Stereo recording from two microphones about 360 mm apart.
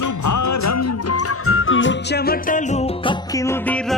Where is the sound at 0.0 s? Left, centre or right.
Left.